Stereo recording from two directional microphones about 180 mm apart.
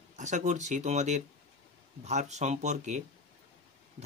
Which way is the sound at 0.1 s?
40° right (ahead or behind).